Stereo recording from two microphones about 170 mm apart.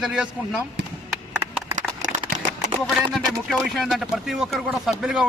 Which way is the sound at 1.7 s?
45° right (ahead or behind).